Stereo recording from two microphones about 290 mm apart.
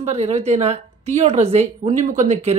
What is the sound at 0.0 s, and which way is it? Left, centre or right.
A woman's voice, right.